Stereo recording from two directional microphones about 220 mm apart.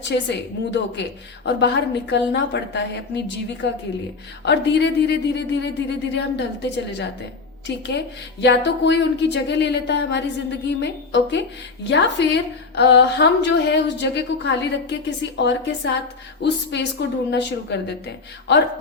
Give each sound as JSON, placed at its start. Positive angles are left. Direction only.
{"t": 0.0, "sound": "a woman's voice", "side_deg": 50}